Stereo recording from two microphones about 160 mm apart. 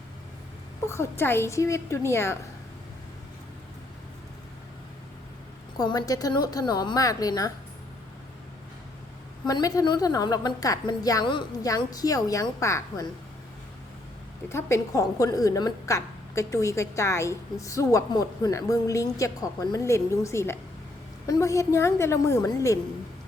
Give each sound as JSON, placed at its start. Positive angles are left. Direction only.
{"t": 0.9, "sound": "a woman's voice", "side_deg": 15}
{"t": 5.7, "sound": "a woman's voice", "side_deg": 25}
{"t": 9.5, "sound": "a woman's voice", "side_deg": 25}
{"t": 14.5, "sound": "a woman's voice", "side_deg": 20}